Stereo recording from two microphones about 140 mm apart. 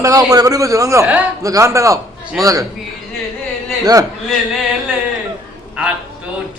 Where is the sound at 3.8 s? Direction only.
25° right (ahead or behind).